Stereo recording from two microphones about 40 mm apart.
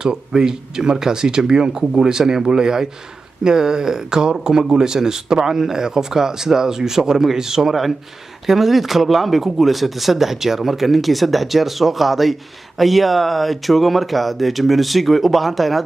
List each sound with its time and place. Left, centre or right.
0.0 s speech: centre